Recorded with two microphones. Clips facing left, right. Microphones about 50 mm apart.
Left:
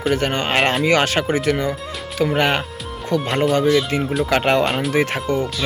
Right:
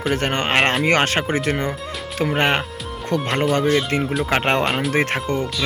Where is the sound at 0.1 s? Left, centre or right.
Right.